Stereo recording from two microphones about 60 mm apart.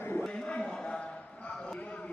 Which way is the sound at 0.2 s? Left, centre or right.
Centre.